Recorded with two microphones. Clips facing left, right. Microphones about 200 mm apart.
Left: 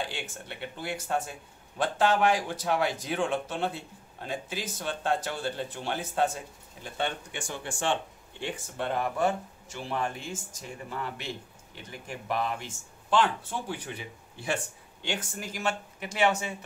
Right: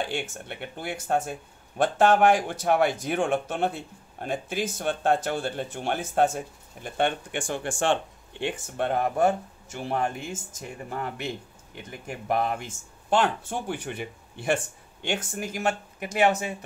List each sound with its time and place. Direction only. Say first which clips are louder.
0.1 s a man's voice: right 6 dB; 55° right (ahead or behind)
12.3 s a man's voice: right 5 dB; 50° right (ahead or behind)